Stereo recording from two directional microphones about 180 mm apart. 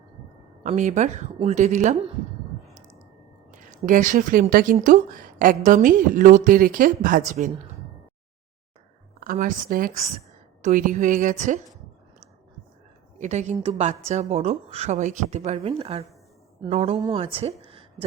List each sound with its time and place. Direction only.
0.6 s a woman's voice: 40° right (ahead or behind)
3.5 s speech: 45° right (ahead or behind)
9.2 s speech: 50° right (ahead or behind)
13.1 s a woman's voice: 40° right (ahead or behind)
17.0 s a woman's voice: 30° right (ahead or behind)